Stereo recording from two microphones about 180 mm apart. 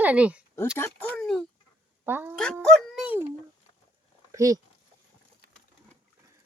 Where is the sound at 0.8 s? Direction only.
10° left (ahead or behind).